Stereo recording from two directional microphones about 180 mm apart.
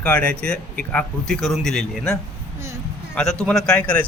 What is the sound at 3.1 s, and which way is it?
Speech, 5° left (ahead or behind).